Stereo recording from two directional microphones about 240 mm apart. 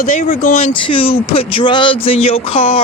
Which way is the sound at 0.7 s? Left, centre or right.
Left.